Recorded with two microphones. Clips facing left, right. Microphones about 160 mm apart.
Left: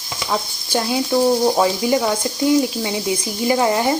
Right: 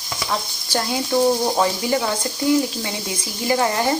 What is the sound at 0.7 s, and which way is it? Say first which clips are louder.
Speech: left 3 dB; 20° left (ahead or behind).